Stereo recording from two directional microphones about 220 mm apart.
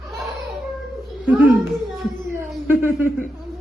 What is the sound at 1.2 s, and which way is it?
A child's voice, 5° right (ahead or behind).